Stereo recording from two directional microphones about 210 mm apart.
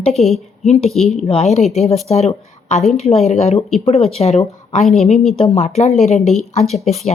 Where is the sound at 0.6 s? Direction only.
30° left (ahead or behind).